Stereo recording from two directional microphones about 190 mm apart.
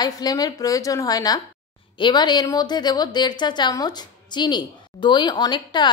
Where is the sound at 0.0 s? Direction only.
20° left (ahead or behind).